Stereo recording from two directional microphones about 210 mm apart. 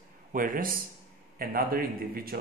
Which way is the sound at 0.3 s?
40° right (ahead or behind).